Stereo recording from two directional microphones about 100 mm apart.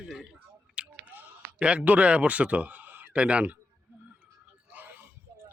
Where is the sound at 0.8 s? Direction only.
10° right (ahead or behind).